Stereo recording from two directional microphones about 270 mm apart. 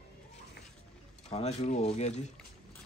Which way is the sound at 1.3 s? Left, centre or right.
Left.